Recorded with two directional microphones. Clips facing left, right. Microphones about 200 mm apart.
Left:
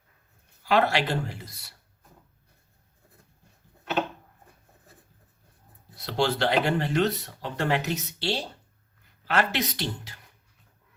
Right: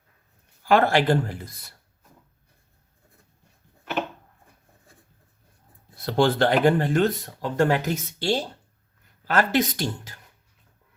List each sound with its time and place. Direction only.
0.6 s speech: 50° right (ahead or behind)
6.0 s speech: 50° right (ahead or behind)